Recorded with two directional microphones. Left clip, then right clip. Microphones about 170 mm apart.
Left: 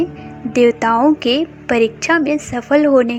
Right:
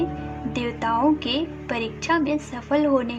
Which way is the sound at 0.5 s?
40° left (ahead or behind).